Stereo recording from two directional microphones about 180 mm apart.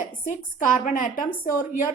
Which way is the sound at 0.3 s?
45° left (ahead or behind).